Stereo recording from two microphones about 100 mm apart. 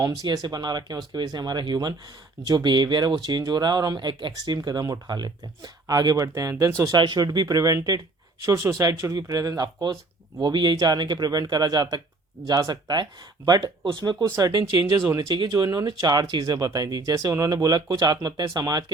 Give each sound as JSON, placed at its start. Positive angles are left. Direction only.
{"t": 0.0, "sound": "speech", "side_deg": -40}
{"t": 6.9, "sound": "speech", "side_deg": -45}
{"t": 14.9, "sound": "speech", "side_deg": -30}
{"t": 15.3, "sound": "speech", "side_deg": -45}